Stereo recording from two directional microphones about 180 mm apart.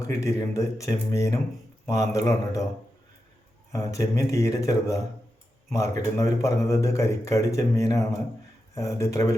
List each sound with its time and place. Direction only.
0.0 s speech: 15° left (ahead or behind)
3.7 s speech: 15° left (ahead or behind)